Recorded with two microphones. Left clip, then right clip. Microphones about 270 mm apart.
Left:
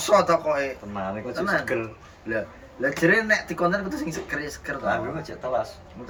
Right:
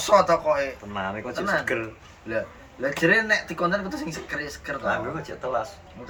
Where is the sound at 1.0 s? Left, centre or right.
Centre.